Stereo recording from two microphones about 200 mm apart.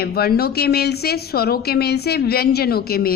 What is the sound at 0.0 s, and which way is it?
Speech, 50° left (ahead or behind).